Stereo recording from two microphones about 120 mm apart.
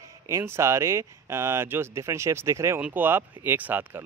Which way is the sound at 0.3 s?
25° right (ahead or behind).